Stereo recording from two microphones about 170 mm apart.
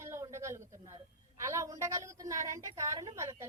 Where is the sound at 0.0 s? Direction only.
15° right (ahead or behind).